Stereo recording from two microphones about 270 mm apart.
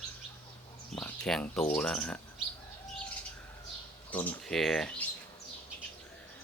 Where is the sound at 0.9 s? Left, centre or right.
Centre.